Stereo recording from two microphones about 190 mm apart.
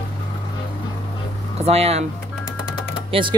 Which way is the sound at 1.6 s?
35° right (ahead or behind).